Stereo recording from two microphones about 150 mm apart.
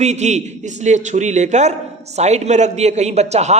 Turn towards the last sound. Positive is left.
turn(degrees=-45)  # may be behind; listen again after turning